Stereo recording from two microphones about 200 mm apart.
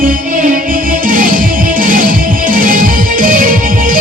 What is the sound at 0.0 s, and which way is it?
Music, 45° right (ahead or behind).